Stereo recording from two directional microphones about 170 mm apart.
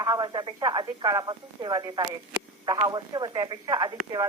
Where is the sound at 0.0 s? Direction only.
20° right (ahead or behind).